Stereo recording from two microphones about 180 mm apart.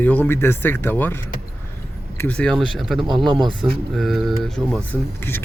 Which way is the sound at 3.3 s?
25° right (ahead or behind).